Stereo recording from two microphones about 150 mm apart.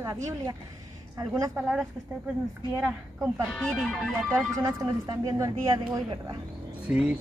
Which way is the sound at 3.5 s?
5° left (ahead or behind).